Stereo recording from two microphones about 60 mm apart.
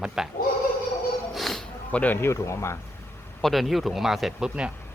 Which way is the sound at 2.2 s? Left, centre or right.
Left.